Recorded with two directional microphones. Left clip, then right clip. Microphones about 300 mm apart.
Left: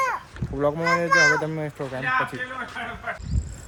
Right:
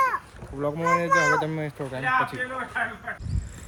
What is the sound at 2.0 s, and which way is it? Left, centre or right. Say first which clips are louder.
Speech: right 1 dB; centre.